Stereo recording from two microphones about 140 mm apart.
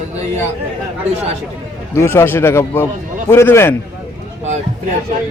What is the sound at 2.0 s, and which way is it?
Speech, 20° left (ahead or behind).